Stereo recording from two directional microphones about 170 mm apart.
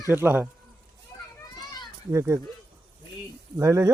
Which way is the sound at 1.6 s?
25° left (ahead or behind).